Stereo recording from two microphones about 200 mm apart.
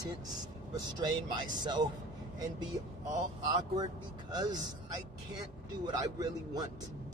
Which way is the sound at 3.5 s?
20° right (ahead or behind).